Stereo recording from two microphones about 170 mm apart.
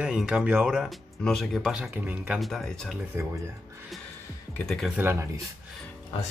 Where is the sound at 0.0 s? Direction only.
5° right (ahead or behind).